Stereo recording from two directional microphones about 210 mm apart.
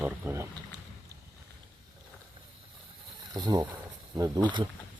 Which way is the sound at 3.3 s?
20° right (ahead or behind).